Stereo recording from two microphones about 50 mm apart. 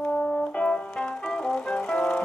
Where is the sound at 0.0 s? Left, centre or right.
Left.